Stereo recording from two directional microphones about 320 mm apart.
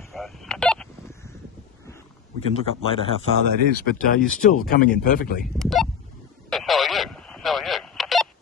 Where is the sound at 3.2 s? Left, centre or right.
Right.